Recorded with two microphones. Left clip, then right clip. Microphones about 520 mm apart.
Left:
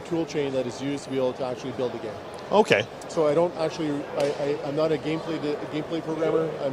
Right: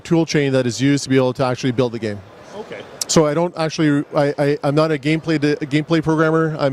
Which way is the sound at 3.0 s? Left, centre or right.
Right.